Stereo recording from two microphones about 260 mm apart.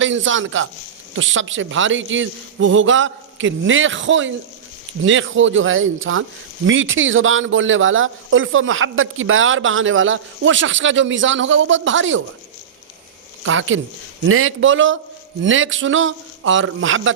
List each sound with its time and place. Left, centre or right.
0.0 s speech: right
13.4 s speech: right